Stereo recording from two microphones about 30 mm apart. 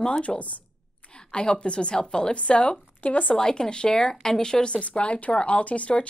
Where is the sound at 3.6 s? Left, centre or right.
Left.